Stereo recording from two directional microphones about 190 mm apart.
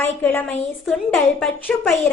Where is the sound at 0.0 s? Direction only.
10° left (ahead or behind).